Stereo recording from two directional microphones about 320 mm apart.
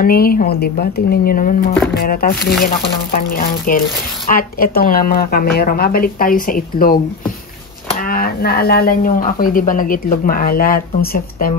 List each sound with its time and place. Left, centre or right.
0.0 s speech: left